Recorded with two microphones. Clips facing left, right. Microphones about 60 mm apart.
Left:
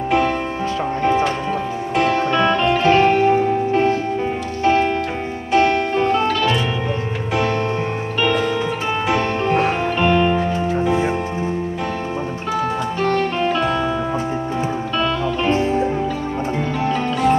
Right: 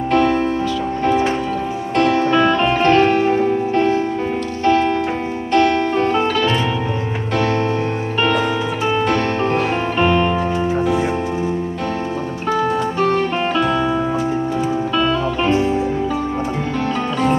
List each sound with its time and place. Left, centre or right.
2.0 s music: left
2.5 s music: centre
2.8 s music: centre
4.6 s music: left
13.6 s music: centre